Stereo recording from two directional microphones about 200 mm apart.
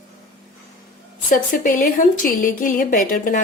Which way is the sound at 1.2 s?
40° left (ahead or behind).